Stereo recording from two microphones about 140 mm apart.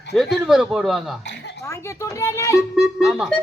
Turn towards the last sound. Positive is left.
turn(degrees=0)  # may be behind; listen again after turning